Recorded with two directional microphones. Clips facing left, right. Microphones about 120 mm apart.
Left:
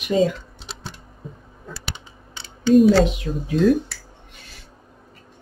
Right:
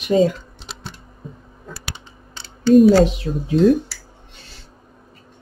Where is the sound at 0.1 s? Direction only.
40° right (ahead or behind).